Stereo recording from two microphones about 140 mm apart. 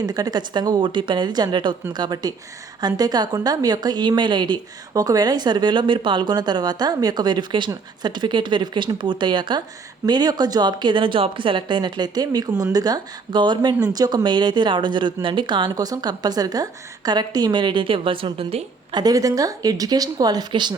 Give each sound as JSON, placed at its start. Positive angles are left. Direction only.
{"t": 0.0, "sound": "a woman's voice", "side_deg": -30}